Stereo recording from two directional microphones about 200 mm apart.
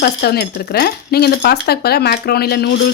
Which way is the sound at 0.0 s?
55° left (ahead or behind).